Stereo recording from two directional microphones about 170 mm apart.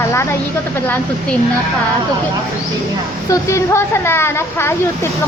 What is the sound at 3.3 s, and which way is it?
Speech, 15° left (ahead or behind).